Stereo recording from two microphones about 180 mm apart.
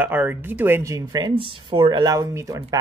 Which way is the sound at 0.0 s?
10° right (ahead or behind).